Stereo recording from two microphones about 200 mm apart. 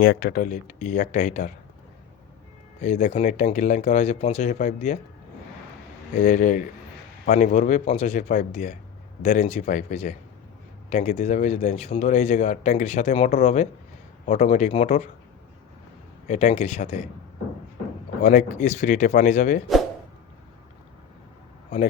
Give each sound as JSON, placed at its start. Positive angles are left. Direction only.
{"t": 0.0, "sound": "speech", "side_deg": 50}
{"t": 2.8, "sound": "speech", "side_deg": 35}
{"t": 6.2, "sound": "speech", "side_deg": 40}
{"t": 16.2, "sound": "speech", "side_deg": 35}
{"t": 18.2, "sound": "speech", "side_deg": 40}